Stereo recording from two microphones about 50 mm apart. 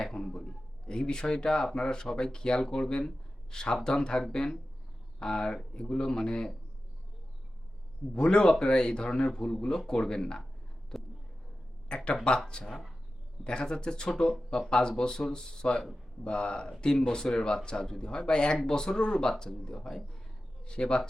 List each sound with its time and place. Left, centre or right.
0.0 s a man's voice: centre
8.1 s speech: centre
10.9 s a sound: centre
11.9 s speech: centre